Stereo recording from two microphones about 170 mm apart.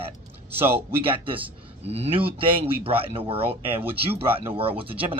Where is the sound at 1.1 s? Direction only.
30° right (ahead or behind).